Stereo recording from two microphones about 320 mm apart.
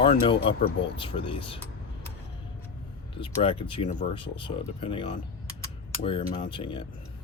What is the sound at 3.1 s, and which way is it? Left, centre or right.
Speech, centre.